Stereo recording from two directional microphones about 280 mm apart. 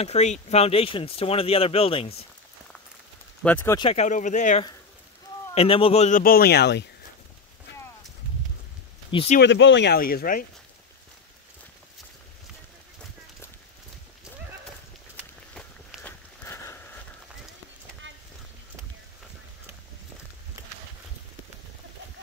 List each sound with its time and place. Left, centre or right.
0.0 s speech: left
3.4 s speech: centre; by 6.9 s left
9.1 s speech: left
9.4 s speech: left
15.5 s a sound: centre